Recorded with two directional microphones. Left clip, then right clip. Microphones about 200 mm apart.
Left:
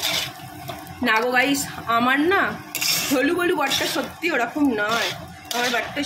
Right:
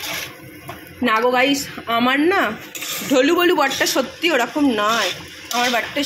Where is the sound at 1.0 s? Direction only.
25° right (ahead or behind).